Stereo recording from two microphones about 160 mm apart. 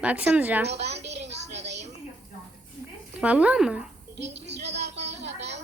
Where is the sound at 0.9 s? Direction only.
90° right.